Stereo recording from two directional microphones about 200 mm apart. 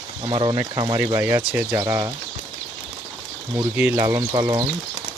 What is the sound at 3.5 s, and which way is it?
Speech, 10° right (ahead or behind).